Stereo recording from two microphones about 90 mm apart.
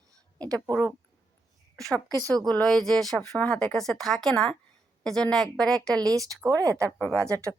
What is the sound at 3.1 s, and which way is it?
A woman's voice, 15° left (ahead or behind).